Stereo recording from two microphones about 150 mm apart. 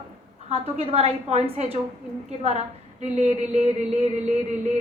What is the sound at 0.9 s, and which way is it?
A woman's voice, 40° right (ahead or behind).